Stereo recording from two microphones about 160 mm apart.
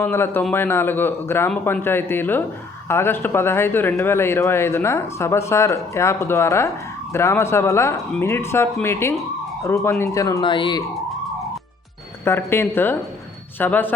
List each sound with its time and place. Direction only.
0.0 s speech: 15° left (ahead or behind)
10.4 s speech: 30° left (ahead or behind)
12.2 s speech: 15° left (ahead or behind)